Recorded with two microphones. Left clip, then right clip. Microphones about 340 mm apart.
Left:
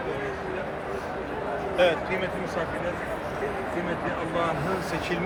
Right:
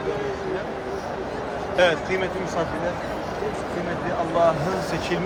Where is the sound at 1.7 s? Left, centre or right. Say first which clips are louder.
Right 3 dB; right.